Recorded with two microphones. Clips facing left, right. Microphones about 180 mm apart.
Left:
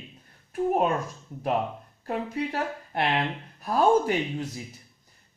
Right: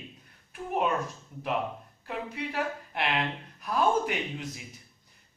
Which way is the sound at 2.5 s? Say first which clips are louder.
Left 3 dB; 40° left (ahead or behind).